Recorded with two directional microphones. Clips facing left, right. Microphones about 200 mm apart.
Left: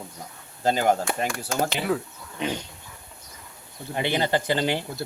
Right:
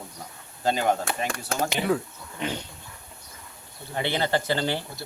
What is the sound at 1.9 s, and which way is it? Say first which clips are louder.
Speech: right 2 dB; centre (ahead or behind).